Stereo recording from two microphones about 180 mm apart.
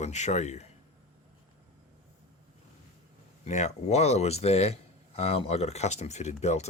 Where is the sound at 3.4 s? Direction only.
40° left (ahead or behind).